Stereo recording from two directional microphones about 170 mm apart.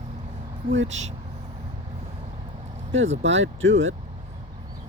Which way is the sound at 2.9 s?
90° right.